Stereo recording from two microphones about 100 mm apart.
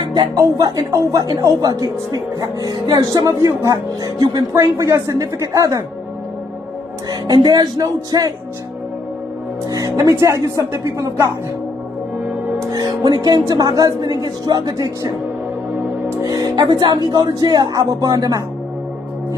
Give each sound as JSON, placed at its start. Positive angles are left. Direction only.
{"t": 0.0, "sound": "music", "side_deg": -50}
{"t": 0.3, "sound": "speech", "side_deg": -35}
{"t": 7.1, "sound": "speech", "side_deg": -40}
{"t": 9.7, "sound": "speech", "side_deg": -35}
{"t": 12.5, "sound": "music", "side_deg": -40}
{"t": 13.5, "sound": "speech", "side_deg": -40}